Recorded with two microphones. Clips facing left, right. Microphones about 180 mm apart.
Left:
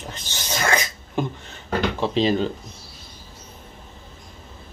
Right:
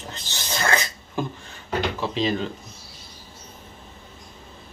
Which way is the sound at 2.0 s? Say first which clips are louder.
Left 4 dB; 30° left (ahead or behind).